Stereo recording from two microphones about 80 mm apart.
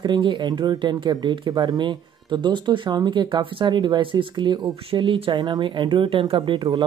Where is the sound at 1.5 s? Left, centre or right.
Right.